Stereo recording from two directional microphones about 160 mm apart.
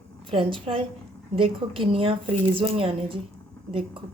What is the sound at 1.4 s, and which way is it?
Speech, 35° right (ahead or behind).